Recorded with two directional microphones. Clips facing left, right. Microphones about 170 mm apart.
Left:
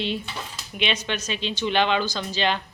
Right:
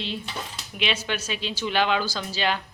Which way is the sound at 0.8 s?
5° right (ahead or behind).